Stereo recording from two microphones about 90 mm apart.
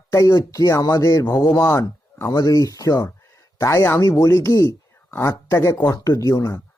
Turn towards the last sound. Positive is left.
turn(degrees=40)  # may be behind; listen again after turning